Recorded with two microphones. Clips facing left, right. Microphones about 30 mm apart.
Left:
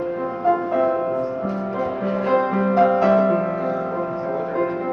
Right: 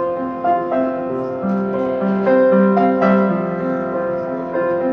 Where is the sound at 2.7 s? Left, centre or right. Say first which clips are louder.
Right 2 dB; centre.